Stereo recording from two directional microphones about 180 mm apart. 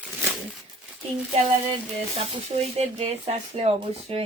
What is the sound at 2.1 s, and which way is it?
A woman's voice, 35° right (ahead or behind).